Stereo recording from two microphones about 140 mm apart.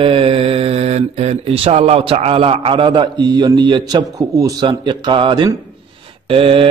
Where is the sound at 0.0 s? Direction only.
40° right (ahead or behind).